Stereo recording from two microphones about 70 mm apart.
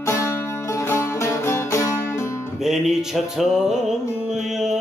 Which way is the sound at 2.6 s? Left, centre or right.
Centre.